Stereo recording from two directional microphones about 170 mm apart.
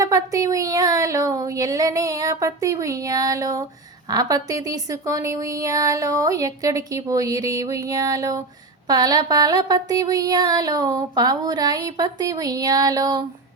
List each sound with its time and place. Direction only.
0.0 s speech: 20° right (ahead or behind)